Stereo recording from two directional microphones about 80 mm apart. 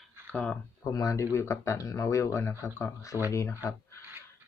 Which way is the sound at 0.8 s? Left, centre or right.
Left.